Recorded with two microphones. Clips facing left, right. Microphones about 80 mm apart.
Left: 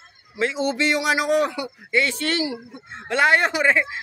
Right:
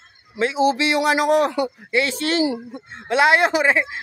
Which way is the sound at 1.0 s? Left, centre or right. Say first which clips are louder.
Right 5 dB; right.